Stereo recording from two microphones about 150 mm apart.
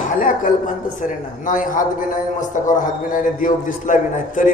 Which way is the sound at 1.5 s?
60° left (ahead or behind).